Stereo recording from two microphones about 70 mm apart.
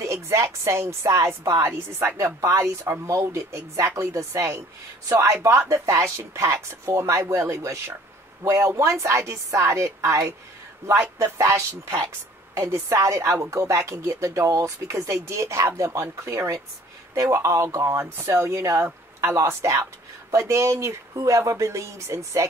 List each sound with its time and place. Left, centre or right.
0.0 s speech: right